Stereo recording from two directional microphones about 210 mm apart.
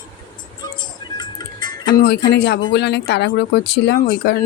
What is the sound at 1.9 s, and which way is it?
Music, 50° left (ahead or behind).